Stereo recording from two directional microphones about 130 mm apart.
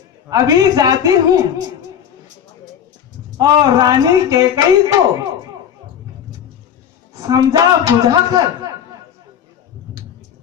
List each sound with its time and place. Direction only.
0.3 s speech: 30° right (ahead or behind)
3.3 s speech: 30° right (ahead or behind)
7.2 s speech: 30° right (ahead or behind)